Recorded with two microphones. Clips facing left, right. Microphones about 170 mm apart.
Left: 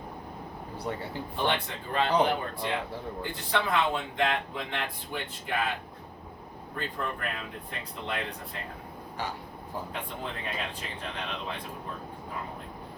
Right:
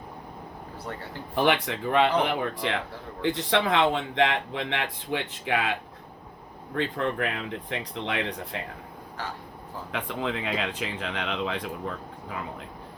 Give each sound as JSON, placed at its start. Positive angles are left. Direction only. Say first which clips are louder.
{"t": 1.5, "sound": "speech", "louder": "right 6 dB", "side_deg": -90}
{"t": 6.7, "sound": "speech", "louder": "right 8 dB", "side_deg": -90}
{"t": 9.9, "sound": "speech", "louder": "right 6 dB", "side_deg": -90}